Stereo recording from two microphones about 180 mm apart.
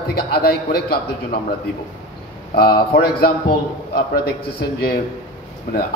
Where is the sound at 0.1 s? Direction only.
60° left (ahead or behind).